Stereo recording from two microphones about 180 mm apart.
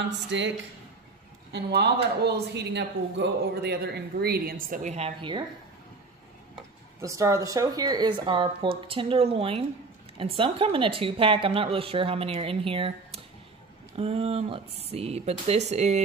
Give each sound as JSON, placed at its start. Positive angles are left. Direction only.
{"t": 0.3, "sound": "a woman's voice", "side_deg": -80}
{"t": 1.5, "sound": "speech", "side_deg": -65}
{"t": 7.0, "sound": "a woman's voice", "side_deg": -15}